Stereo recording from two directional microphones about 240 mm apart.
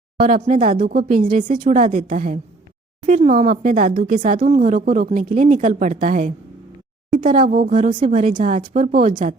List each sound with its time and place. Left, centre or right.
0.2 s speech: right
3.2 s speech: right